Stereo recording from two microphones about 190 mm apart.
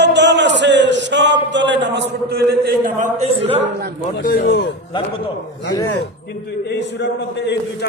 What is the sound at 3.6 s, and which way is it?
Speech, 55° right (ahead or behind).